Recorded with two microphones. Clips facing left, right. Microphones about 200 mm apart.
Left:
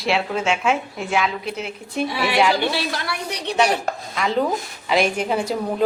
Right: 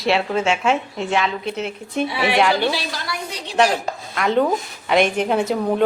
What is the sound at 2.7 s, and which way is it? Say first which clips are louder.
Speech: even; 60° left (ahead or behind).